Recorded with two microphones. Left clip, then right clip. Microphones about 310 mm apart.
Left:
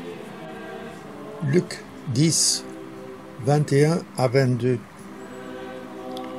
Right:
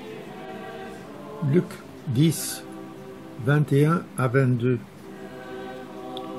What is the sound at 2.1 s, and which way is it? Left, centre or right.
A man's voice, centre.